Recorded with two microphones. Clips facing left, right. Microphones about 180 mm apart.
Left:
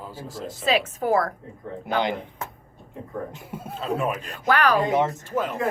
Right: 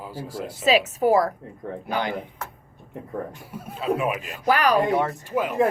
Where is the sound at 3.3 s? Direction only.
20° left (ahead or behind).